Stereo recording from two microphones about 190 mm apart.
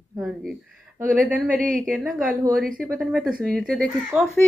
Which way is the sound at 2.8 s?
Centre (ahead or behind).